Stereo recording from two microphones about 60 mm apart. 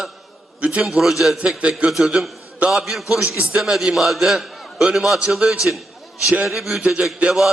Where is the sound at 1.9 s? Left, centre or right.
Centre.